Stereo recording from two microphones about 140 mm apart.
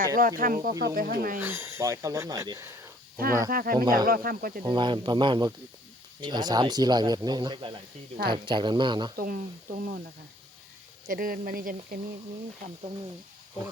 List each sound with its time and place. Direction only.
0.2 s speech: 90° right
0.7 s speech: 25° right (ahead or behind)
0.9 s speech: 90° right
1.4 s speech: 15° right (ahead or behind)
3.2 s speech: 90° right
4.6 s speech: 35° right (ahead or behind)
9.1 s speech: 90° right
11.1 s speech: 90° right